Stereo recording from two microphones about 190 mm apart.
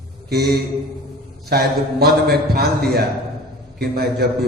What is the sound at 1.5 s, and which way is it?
A man's voice, 55° right (ahead or behind).